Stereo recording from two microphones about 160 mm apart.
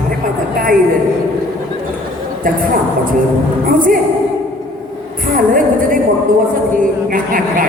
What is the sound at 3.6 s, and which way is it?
Speech, 60° right (ahead or behind).